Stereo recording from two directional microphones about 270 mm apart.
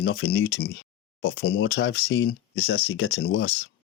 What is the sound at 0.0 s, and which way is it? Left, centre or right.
Speech, left.